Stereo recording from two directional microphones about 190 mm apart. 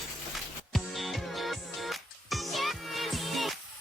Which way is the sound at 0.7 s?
Centre (ahead or behind).